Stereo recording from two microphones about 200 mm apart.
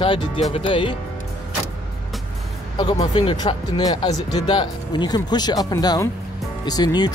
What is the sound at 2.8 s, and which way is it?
Speech, 25° left (ahead or behind).